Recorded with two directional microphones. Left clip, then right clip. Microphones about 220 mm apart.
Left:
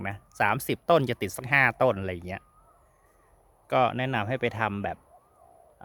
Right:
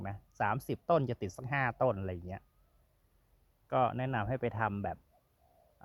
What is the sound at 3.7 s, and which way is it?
Speech, 20° left (ahead or behind).